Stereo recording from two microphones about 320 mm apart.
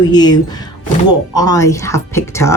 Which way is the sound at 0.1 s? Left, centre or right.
Centre.